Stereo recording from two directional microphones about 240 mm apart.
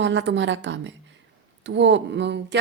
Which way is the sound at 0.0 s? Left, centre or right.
Right.